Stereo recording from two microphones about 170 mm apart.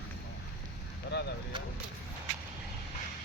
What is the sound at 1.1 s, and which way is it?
Vehicle, 75° left (ahead or behind).